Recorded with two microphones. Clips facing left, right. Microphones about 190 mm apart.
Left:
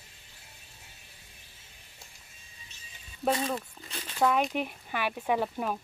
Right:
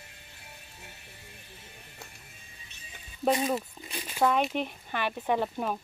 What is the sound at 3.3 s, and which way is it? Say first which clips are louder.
Speech: right 2 dB; 15° right (ahead or behind).